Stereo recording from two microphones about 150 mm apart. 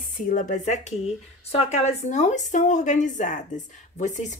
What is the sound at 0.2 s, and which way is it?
A woman's voice, 60° left (ahead or behind).